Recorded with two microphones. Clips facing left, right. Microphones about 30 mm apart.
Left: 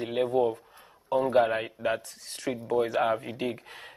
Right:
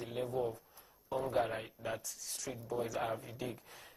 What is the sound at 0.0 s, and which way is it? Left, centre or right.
A man's voice, left.